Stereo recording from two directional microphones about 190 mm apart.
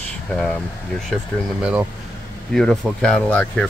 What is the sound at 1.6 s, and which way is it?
Speech, 5° right (ahead or behind).